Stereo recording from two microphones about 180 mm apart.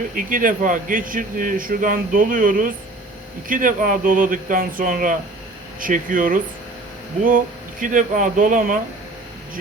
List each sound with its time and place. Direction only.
0.1 s speech: 50° right (ahead or behind)